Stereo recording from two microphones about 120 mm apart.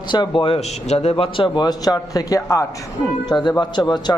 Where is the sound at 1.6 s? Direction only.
30° left (ahead or behind).